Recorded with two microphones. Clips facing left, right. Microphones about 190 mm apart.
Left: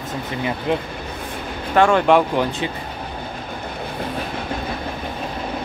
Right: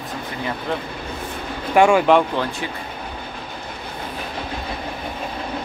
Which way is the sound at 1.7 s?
10° right (ahead or behind).